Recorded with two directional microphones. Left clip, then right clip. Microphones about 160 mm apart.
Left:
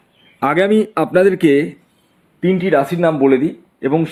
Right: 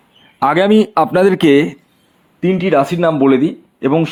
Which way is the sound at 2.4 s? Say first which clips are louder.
Right 1 dB; 30° right (ahead or behind).